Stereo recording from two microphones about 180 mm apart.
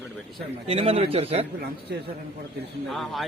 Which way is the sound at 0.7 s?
35° right (ahead or behind).